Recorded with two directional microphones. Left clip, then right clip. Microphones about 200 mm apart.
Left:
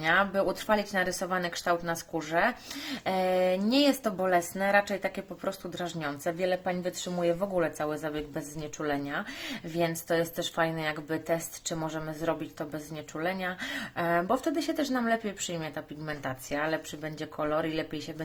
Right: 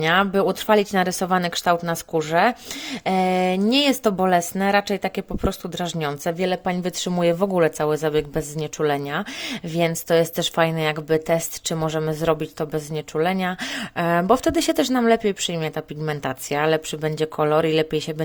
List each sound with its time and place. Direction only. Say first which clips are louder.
0.0 s speech: right 7 dB; 45° right (ahead or behind)